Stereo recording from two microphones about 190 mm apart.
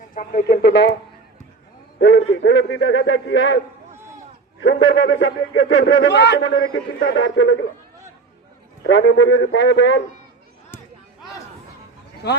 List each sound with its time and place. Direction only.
0.1 s speech: 45° left (ahead or behind); by 0.9 s 60° left (ahead or behind)
2.0 s a man's voice: 65° left (ahead or behind)
4.6 s a man's voice: 80° left
8.9 s a man's voice: 80° left
12.2 s speech: 60° left (ahead or behind)